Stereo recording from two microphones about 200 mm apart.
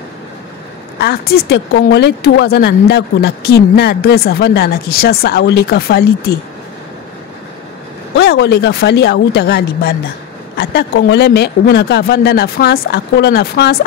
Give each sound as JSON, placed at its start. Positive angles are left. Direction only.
{"t": 0.9, "sound": "speech", "side_deg": 50}
{"t": 8.2, "sound": "speech", "side_deg": 55}